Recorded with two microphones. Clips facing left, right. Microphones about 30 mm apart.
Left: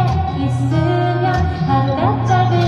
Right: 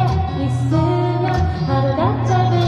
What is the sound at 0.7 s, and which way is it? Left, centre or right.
Music, left.